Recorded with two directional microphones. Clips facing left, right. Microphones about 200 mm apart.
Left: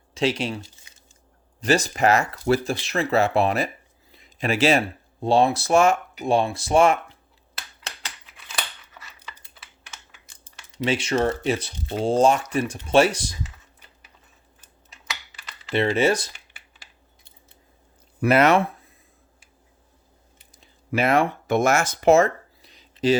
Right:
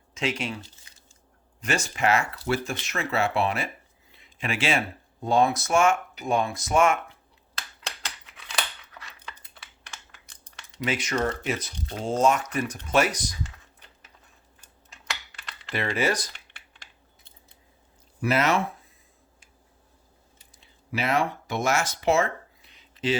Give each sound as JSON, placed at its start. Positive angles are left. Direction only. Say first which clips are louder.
{"t": 0.1, "sound": "speech", "louder": "left 6 dB", "side_deg": 35}
{"t": 1.6, "sound": "speech", "louder": "left 6 dB", "side_deg": 35}
{"t": 4.1, "sound": "a sound", "louder": "left 6 dB", "side_deg": 40}
{"t": 5.2, "sound": "speech", "louder": "left 3 dB", "side_deg": 30}
{"t": 7.9, "sound": "scissors", "louder": "even", "side_deg": 5}
{"t": 10.8, "sound": "speech", "louder": "left 5 dB", "side_deg": 30}
{"t": 13.4, "sound": "typing", "louder": "left 1 dB", "side_deg": 5}
{"t": 15.7, "sound": "speech", "louder": "left 6 dB", "side_deg": 25}
{"t": 16.3, "sound": "typing", "louder": "left 1 dB", "side_deg": 5}
{"t": 18.2, "sound": "speech", "louder": "left 6 dB", "side_deg": 60}
{"t": 20.5, "sound": "a sound", "louder": "left 6 dB", "side_deg": 45}